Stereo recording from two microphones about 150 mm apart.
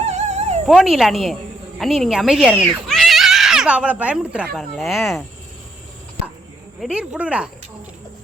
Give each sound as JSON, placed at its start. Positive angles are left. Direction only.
{"t": 0.1, "sound": "cat", "side_deg": -50}
{"t": 0.7, "sound": "speech", "side_deg": -5}
{"t": 6.7, "sound": "speech", "side_deg": -5}